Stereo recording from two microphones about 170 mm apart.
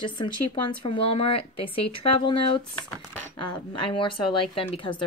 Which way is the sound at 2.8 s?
10° left (ahead or behind).